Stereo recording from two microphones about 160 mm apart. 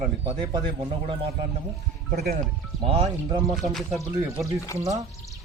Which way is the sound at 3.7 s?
Centre (ahead or behind).